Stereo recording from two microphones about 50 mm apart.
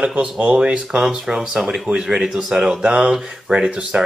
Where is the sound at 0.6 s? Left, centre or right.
Centre.